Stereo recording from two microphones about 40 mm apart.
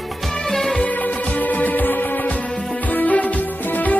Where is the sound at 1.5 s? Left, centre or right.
Left.